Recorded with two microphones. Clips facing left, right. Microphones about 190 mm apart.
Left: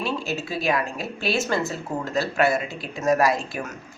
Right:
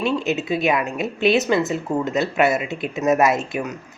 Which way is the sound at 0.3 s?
20° right (ahead or behind).